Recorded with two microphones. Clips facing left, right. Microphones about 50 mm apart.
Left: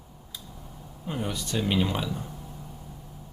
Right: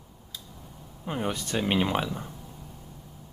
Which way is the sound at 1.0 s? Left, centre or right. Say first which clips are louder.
Right 2 dB; right.